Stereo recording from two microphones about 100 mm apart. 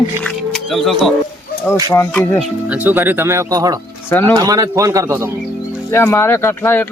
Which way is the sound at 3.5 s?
40° right (ahead or behind).